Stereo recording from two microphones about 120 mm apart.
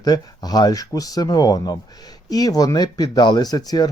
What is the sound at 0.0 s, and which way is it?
Speech, 35° left (ahead or behind).